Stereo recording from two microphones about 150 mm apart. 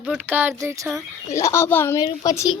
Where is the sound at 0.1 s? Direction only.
15° right (ahead or behind).